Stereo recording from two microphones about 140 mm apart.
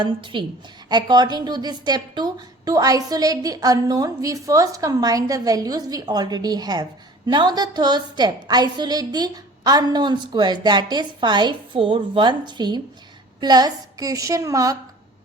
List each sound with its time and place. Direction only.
0.0 s a woman's voice: 35° right (ahead or behind)